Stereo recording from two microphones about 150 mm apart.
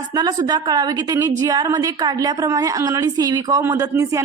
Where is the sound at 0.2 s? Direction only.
25° right (ahead or behind).